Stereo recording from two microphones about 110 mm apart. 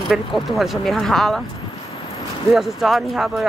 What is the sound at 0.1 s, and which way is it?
Speech, centre (ahead or behind).